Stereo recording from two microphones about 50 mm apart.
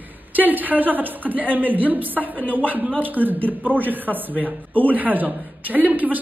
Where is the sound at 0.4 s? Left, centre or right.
Right.